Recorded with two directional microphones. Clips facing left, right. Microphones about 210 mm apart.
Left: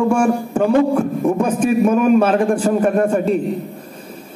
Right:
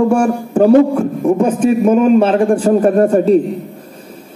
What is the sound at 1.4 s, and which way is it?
A man's voice, 25° right (ahead or behind).